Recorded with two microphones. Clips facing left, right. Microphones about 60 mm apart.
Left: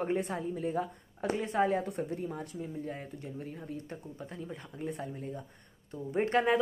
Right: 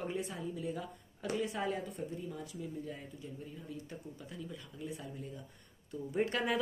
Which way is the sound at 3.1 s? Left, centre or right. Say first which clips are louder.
Left 5 dB; left.